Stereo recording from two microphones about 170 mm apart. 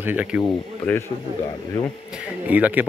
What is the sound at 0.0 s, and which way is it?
Speech, 10° right (ahead or behind).